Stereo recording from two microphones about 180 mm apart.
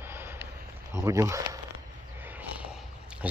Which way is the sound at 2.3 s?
10° right (ahead or behind).